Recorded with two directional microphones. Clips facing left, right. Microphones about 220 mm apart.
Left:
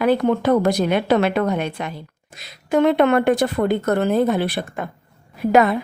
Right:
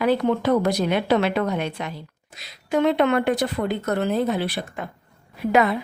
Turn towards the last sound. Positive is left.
turn(degrees=45)  # may be behind; listen again after turning